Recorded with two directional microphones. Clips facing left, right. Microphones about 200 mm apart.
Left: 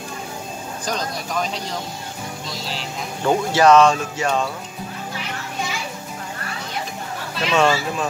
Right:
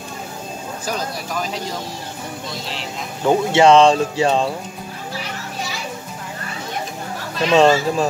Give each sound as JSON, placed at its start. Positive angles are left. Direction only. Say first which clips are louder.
{"t": 0.8, "sound": "speech", "louder": "even", "side_deg": -5}
{"t": 3.3, "sound": "speech", "louder": "right 2 dB", "side_deg": -25}
{"t": 7.4, "sound": "a child's voice", "louder": "right 5 dB", "side_deg": -40}